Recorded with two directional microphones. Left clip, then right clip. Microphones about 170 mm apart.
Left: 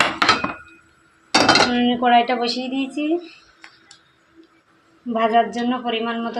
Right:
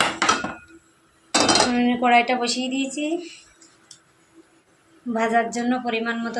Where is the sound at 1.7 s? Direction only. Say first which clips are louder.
Left 2 dB; 25° left (ahead or behind).